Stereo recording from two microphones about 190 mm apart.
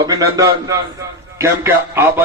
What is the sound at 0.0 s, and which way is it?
A man's voice, 20° right (ahead or behind).